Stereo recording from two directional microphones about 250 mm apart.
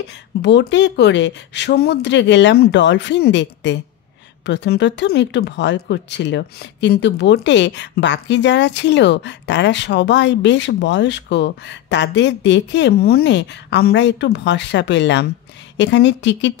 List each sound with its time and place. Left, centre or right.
0.4 s speech: left